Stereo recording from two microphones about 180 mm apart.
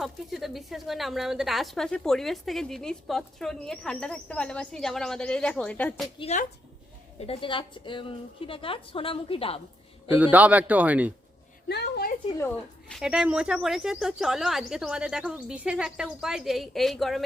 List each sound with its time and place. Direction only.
0.0 s a woman's voice: centre (ahead or behind)
6.1 s a woman's voice: 35° left (ahead or behind)
10.2 s a man's voice: 10° right (ahead or behind)
11.7 s a woman's voice: 65° left (ahead or behind)
12.4 s a woman's voice: 10° left (ahead or behind)
13.0 s a woman's voice: 5° right (ahead or behind)